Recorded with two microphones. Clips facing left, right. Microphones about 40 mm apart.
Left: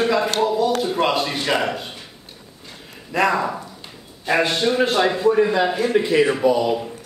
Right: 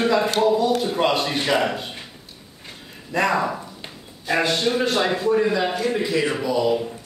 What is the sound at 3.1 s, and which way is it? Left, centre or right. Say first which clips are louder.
Speech: left 1 dB; centre.